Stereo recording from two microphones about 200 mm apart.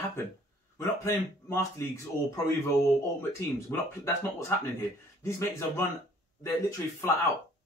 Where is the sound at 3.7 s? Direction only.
10° left (ahead or behind).